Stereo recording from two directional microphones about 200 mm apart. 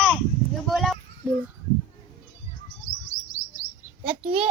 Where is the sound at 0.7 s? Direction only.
Centre (ahead or behind).